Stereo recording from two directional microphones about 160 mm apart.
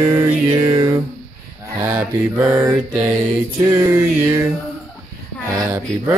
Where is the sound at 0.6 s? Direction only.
25° right (ahead or behind).